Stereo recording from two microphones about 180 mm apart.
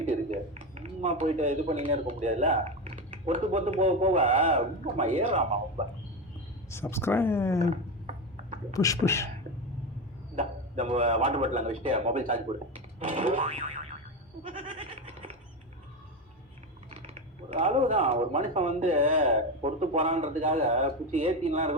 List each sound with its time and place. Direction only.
0.1 s speech: 35° right (ahead or behind)
6.7 s speech: 15° left (ahead or behind)
7.6 s a sound: 40° right (ahead or behind)
8.7 s speech: 20° left (ahead or behind)
10.3 s speech: 40° right (ahead or behind)
14.4 s goat: 45° right (ahead or behind)
17.5 s speech: 40° right (ahead or behind)